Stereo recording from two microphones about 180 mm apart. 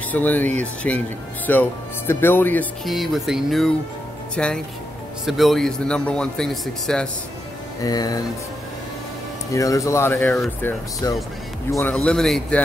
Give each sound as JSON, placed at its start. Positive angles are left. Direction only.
{"t": 0.1, "sound": "a man's voice", "side_deg": 10}
{"t": 7.8, "sound": "speech", "side_deg": 20}
{"t": 9.5, "sound": "speech", "side_deg": 15}
{"t": 11.0, "sound": "speech", "side_deg": 20}
{"t": 11.9, "sound": "a man's voice", "side_deg": 5}